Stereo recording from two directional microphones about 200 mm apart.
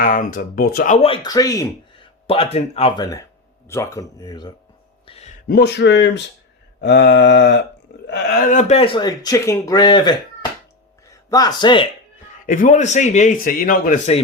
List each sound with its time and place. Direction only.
0.0 s speech: 45° left (ahead or behind)
0.9 s speech: 25° left (ahead or behind)
2.2 s speech: 30° left (ahead or behind)
5.0 s a sound: 30° left (ahead or behind)
5.5 s speech: 55° left (ahead or behind); by 11.9 s 25° left (ahead or behind)
12.5 s a man's voice: 40° left (ahead or behind)